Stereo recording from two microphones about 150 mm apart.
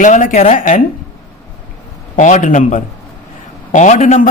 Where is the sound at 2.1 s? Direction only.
55° left (ahead or behind).